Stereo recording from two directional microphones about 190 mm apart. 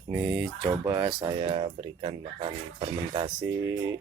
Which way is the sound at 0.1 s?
5° right (ahead or behind).